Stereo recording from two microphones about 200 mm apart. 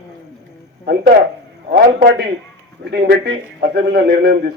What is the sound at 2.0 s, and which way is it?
A man's voice, 55° right (ahead or behind).